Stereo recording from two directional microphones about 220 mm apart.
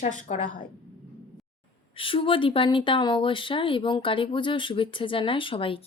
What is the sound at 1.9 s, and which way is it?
Speech, 25° left (ahead or behind).